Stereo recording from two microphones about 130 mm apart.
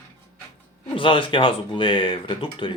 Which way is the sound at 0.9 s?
40° left (ahead or behind).